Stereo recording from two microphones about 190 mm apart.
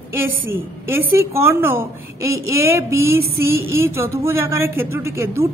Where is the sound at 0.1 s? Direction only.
10° right (ahead or behind).